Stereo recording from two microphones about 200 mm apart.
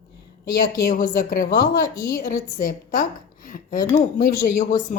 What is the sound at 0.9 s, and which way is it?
Speech, 45° left (ahead or behind).